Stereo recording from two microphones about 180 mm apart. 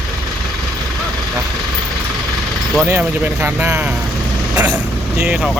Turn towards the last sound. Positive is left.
turn(degrees=-5)  # may be behind; listen again after turning